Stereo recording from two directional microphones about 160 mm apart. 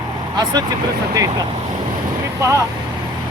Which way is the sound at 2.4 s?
20° right (ahead or behind).